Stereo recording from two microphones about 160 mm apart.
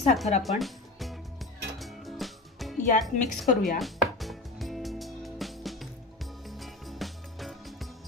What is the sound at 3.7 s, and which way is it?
Chopping, centre (ahead or behind).